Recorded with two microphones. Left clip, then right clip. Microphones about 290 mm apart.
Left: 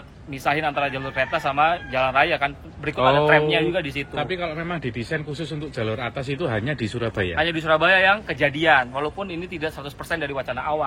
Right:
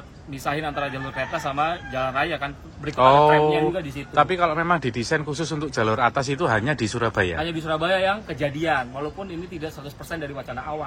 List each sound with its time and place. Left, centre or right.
0.5 s a man's voice: centre
4.8 s speech: right
5.3 s a man's voice: centre
10.1 s speech: centre